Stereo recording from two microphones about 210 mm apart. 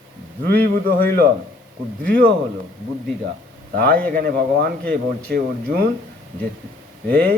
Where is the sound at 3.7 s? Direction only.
45° right (ahead or behind).